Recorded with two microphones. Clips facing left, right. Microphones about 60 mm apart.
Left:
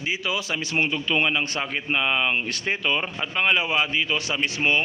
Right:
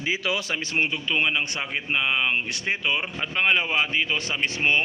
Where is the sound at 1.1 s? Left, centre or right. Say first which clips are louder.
Left 1 dB; centre.